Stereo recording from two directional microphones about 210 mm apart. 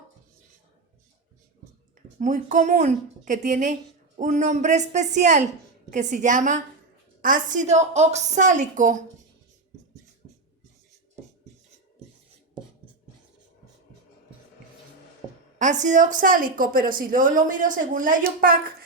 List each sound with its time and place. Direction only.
2.0 s a woman's voice: 35° right (ahead or behind)
15.5 s a woman's voice: 35° right (ahead or behind)